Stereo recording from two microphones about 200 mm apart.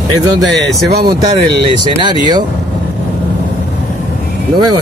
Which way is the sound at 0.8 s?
55° right (ahead or behind).